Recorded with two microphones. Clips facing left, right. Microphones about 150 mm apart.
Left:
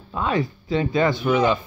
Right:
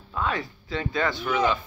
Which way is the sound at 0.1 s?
20° left (ahead or behind).